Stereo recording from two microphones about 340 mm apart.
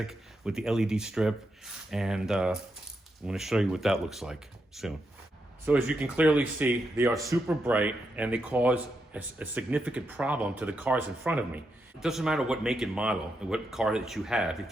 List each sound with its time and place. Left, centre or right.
0.0 s speech: centre